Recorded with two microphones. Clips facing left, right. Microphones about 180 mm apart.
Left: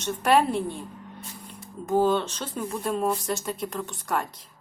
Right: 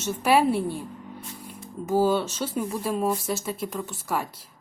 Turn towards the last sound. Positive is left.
turn(degrees=-5)  # may be behind; listen again after turning